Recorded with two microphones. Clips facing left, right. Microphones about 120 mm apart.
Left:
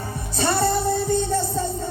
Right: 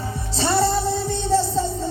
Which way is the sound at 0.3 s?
55° left (ahead or behind).